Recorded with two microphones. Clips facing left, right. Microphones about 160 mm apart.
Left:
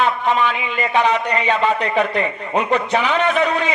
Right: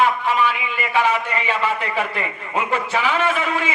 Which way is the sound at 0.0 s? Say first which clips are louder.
Left 1 dB; 20° left (ahead or behind).